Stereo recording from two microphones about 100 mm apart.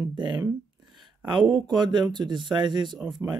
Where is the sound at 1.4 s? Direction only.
Centre (ahead or behind).